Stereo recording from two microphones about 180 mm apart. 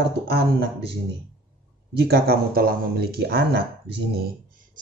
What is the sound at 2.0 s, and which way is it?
Speech, 60° right (ahead or behind).